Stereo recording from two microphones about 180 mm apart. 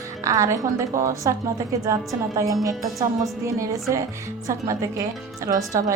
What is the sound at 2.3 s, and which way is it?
A woman's voice, 20° right (ahead or behind).